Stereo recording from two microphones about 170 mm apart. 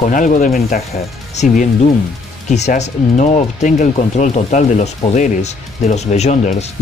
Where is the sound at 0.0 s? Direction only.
50° left (ahead or behind).